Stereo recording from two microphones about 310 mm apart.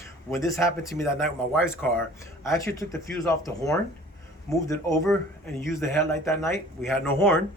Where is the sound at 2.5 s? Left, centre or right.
Centre.